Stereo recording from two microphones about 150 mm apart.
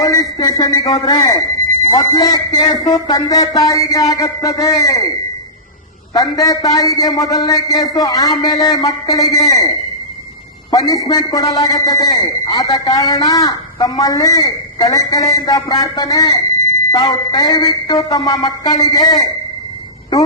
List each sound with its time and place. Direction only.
0.0 s a man's voice: 25° left (ahead or behind)
6.1 s a man's voice: 25° left (ahead or behind)
10.7 s a man's voice: 25° left (ahead or behind)